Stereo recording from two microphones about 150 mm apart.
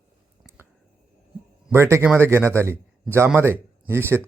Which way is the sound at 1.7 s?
20° right (ahead or behind).